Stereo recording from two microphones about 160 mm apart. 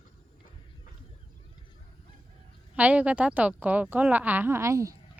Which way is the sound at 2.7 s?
10° right (ahead or behind).